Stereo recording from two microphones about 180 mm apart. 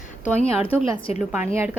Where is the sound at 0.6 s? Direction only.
35° left (ahead or behind).